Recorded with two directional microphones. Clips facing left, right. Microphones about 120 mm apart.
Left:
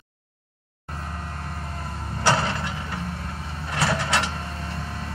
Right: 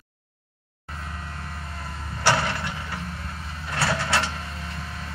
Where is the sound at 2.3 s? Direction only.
20° left (ahead or behind).